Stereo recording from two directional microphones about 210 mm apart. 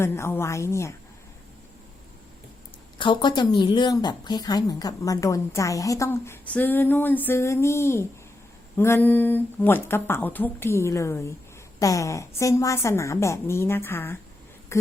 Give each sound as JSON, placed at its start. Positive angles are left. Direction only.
{"t": 0.0, "sound": "speech", "side_deg": 10}
{"t": 3.0, "sound": "speech", "side_deg": 20}